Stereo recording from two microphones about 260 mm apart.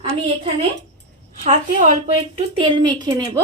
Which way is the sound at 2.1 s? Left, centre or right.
Centre.